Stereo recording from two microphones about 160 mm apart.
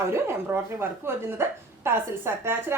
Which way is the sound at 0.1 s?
15° right (ahead or behind).